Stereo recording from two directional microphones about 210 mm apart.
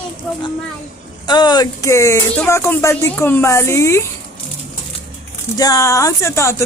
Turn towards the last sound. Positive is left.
turn(degrees=15)  # may be behind; listen again after turning